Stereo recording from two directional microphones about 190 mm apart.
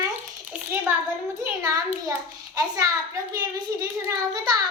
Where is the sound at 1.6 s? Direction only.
20° right (ahead or behind).